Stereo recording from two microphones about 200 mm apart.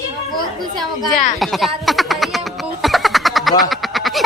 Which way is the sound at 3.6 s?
Centre (ahead or behind).